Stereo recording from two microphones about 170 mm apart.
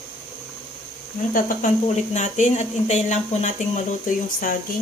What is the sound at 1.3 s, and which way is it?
Speech, 50° left (ahead or behind).